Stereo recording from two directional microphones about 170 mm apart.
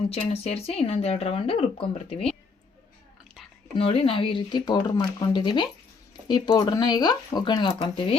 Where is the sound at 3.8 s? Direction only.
35° left (ahead or behind).